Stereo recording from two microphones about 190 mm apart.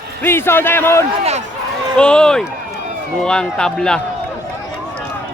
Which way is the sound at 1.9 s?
5° left (ahead or behind).